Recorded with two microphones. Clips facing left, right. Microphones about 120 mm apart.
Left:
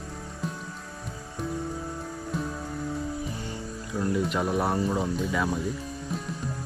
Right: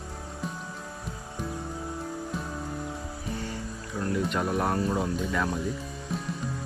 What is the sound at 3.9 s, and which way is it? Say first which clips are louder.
Speech: left 2 dB; 5° left (ahead or behind).